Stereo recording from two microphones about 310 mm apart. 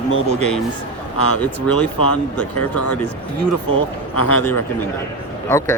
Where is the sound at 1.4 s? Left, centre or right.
Centre.